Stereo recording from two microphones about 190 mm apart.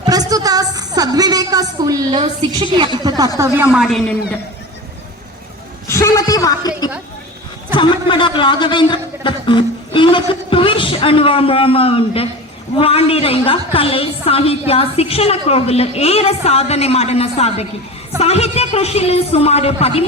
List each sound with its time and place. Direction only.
0.0 s a woman's voice: 20° right (ahead or behind)
3.7 s a man's voice: centre (ahead or behind)
5.9 s a man's voice: 15° left (ahead or behind); by 20.1 s 30° left (ahead or behind)